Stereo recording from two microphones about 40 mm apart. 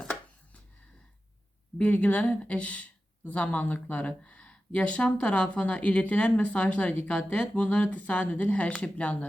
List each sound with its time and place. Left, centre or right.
1.8 s speech: left